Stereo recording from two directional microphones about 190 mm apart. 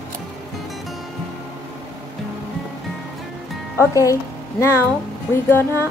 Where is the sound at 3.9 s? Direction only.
15° left (ahead or behind).